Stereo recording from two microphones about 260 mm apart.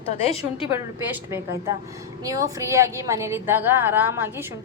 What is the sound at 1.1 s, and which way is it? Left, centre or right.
A woman's voice, centre.